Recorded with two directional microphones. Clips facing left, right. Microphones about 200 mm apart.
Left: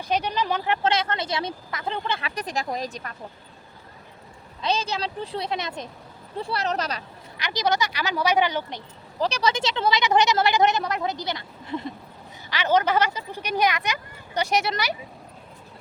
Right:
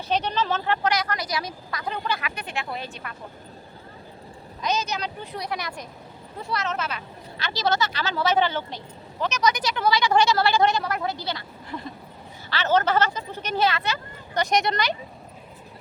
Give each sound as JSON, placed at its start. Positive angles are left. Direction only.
{"t": 0.1, "sound": "speech", "side_deg": 10}
{"t": 4.6, "sound": "speech", "side_deg": 30}
{"t": 7.3, "sound": "speech", "side_deg": 15}
{"t": 9.1, "sound": "speech", "side_deg": 35}